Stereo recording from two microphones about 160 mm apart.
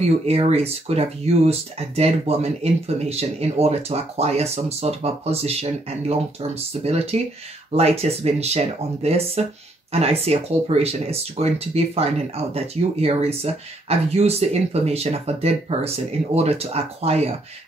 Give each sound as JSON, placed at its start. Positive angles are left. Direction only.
{"t": 0.3, "sound": "speech", "side_deg": -40}